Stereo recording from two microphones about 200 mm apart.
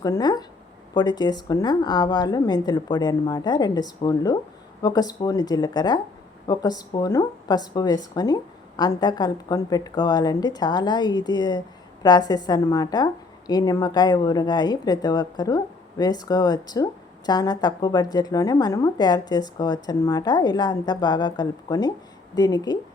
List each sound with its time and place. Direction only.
0.0 s speech: 20° left (ahead or behind)